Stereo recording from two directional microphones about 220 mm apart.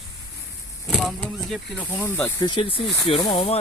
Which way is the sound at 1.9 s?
10° left (ahead or behind).